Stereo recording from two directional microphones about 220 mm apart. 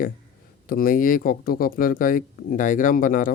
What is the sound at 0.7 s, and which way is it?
Speech, 40° left (ahead or behind).